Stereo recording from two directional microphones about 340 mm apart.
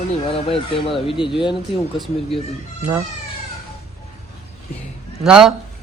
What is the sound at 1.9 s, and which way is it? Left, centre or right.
A man's voice, centre.